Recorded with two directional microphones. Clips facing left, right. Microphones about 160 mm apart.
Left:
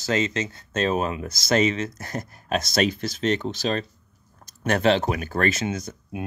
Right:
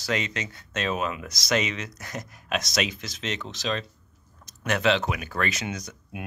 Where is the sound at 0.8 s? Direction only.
35° left (ahead or behind).